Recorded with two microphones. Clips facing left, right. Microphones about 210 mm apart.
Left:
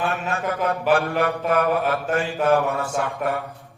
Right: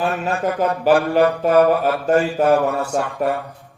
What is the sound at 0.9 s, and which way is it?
Mantra, 30° right (ahead or behind).